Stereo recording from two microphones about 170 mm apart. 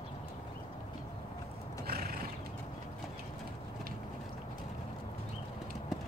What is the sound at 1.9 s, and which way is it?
Horse, 65° right (ahead or behind).